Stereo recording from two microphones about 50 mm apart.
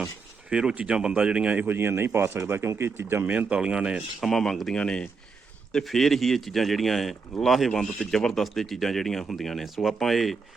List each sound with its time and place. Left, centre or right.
0.5 s speech: centre
1.5 s speech: right
2.4 s speech: right
3.2 s speech: right
4.2 s speech: centre
4.7 s speech: centre
5.8 s speech: centre
7.7 s speech: centre